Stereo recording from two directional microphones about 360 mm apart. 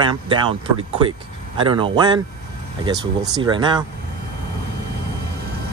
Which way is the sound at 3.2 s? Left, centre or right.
Centre.